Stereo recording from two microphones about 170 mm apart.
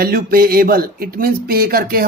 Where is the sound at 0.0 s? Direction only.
60° right (ahead or behind).